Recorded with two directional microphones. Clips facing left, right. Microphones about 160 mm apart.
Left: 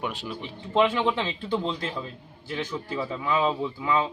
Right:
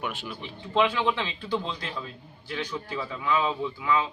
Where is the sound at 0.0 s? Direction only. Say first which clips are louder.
Left 2 dB; 35° left (ahead or behind).